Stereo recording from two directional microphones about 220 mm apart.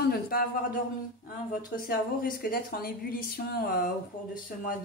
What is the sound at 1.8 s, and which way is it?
A woman's voice, 40° left (ahead or behind).